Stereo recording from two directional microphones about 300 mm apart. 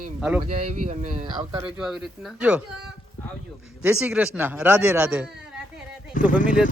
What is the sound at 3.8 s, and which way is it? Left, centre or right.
A man's voice, centre.